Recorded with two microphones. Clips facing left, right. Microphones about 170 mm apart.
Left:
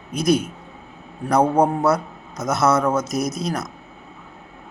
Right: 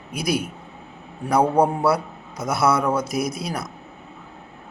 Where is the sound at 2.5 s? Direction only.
10° right (ahead or behind).